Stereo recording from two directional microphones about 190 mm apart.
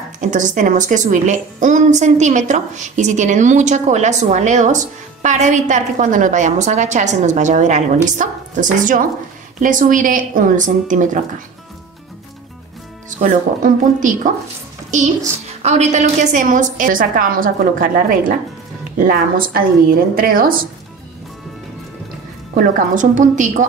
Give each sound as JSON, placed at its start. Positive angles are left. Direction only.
{"t": 0.3, "sound": "a woman's voice", "side_deg": -40}
{"t": 13.2, "sound": "a woman's voice", "side_deg": -45}
{"t": 15.6, "sound": "a woman's voice", "side_deg": -35}
{"t": 22.5, "sound": "a woman's voice", "side_deg": -45}